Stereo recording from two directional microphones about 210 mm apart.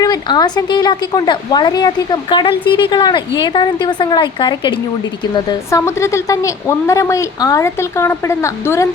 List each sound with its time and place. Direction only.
0.0 s a woman's voice: 20° left (ahead or behind)